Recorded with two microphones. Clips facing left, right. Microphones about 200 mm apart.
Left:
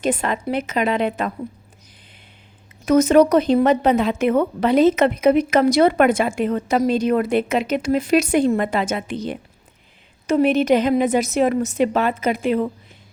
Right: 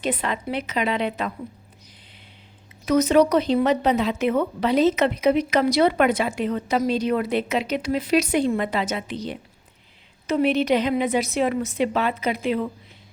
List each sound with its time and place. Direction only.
0.0 s a woman's voice: 45° left (ahead or behind)
2.8 s a woman's voice: 50° left (ahead or behind)